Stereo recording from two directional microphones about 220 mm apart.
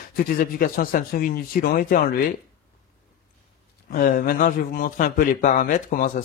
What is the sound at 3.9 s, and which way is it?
Speech, 40° left (ahead or behind).